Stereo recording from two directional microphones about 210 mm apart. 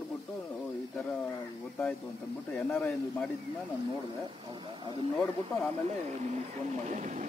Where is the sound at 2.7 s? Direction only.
5° left (ahead or behind).